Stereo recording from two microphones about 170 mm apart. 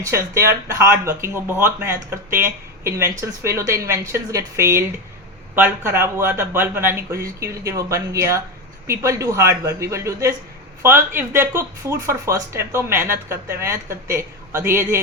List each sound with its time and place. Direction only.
0.0 s speech: 15° right (ahead or behind)